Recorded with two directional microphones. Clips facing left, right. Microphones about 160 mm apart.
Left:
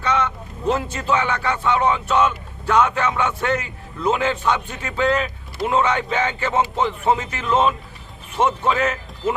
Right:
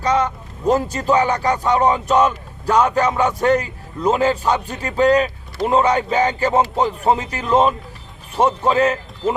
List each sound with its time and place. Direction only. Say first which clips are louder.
0.0 s a man's voice: right 3 dB; 35° right (ahead or behind)